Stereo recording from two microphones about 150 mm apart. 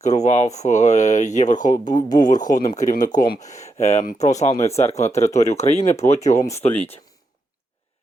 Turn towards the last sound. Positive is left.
turn(degrees=45)  # may be behind; listen again after turning